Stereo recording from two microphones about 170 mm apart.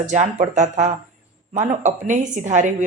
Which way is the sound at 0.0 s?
45° right (ahead or behind).